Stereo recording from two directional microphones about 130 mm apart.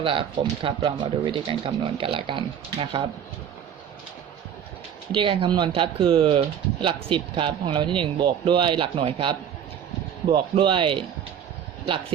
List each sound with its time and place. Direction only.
0.0 s speech: 40° right (ahead or behind)
5.1 s speech: 40° right (ahead or behind)